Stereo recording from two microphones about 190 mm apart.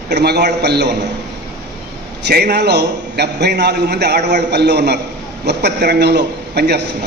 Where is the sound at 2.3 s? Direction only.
60° right (ahead or behind).